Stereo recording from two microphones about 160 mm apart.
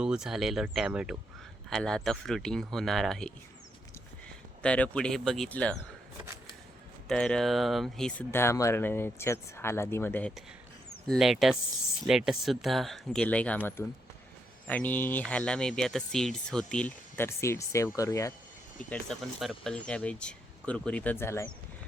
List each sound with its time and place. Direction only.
0.0 s speech: 5° right (ahead or behind)
4.6 s speech: 5° left (ahead or behind)
7.1 s speech: 5° left (ahead or behind)
8.3 s speech: 15° left (ahead or behind)
11.0 s speech: centre (ahead or behind); by 18.3 s 20° left (ahead or behind)
18.9 s speech: 5° left (ahead or behind)